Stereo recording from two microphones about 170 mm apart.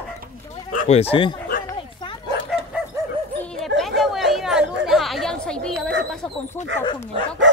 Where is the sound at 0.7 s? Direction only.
45° left (ahead or behind).